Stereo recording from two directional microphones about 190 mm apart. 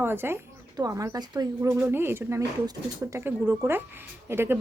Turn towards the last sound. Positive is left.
turn(degrees=-10)  # may be behind; listen again after turning